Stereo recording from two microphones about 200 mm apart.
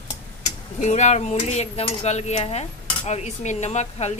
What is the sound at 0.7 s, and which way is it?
Speech, 35° left (ahead or behind).